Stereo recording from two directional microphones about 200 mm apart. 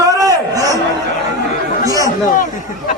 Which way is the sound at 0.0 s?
15° right (ahead or behind).